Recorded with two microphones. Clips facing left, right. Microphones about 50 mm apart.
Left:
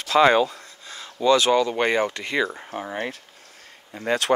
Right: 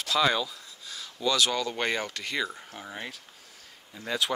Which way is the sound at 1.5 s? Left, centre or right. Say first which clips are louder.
Left 9 dB; left.